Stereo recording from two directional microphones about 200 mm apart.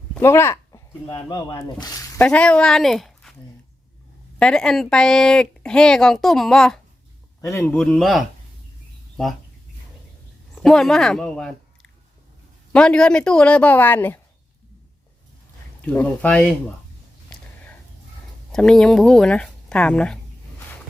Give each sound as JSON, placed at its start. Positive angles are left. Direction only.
{"t": 0.1, "sound": "a sound", "side_deg": 10}
{"t": 1.0, "sound": "speech", "side_deg": 25}
{"t": 2.1, "sound": "speech", "side_deg": 5}
{"t": 4.4, "sound": "speech", "side_deg": 5}
{"t": 10.5, "sound": "a woman's voice", "side_deg": 0}
{"t": 15.8, "sound": "speech", "side_deg": 5}
{"t": 18.5, "sound": "speech", "side_deg": 5}